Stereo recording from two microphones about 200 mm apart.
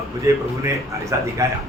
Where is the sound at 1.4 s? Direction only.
15° right (ahead or behind).